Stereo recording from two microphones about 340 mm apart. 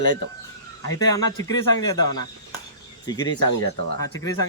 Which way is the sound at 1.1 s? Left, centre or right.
Centre.